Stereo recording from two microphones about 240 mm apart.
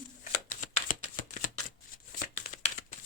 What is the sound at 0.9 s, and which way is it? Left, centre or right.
Shuffling cards, left.